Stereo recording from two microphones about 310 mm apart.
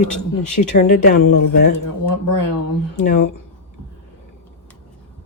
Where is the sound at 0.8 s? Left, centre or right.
Left.